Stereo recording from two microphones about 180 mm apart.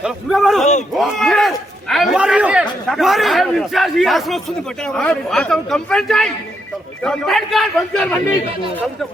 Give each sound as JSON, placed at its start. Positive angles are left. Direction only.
{"t": 0.0, "sound": "a man's voice", "side_deg": 0}
{"t": 0.6, "sound": "speech", "side_deg": 40}
{"t": 0.9, "sound": "a man's voice", "side_deg": 0}